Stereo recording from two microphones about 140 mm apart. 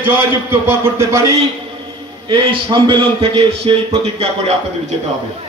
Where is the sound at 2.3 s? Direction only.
35° right (ahead or behind).